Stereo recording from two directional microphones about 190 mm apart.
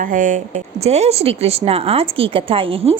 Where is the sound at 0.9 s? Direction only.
35° right (ahead or behind).